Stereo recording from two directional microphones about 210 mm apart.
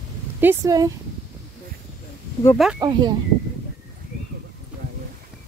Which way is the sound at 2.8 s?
20° right (ahead or behind).